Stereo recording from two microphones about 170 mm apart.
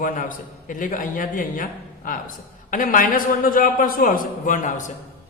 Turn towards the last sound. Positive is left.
turn(degrees=50)  # may be behind; listen again after turning